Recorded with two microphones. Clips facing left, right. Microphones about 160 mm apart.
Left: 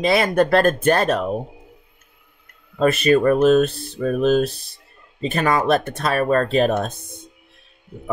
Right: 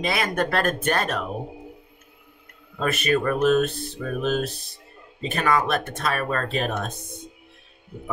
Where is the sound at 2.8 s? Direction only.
30° left (ahead or behind).